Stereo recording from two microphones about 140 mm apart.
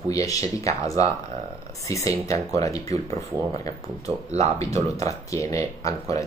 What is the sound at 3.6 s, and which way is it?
Speech, 50° right (ahead or behind).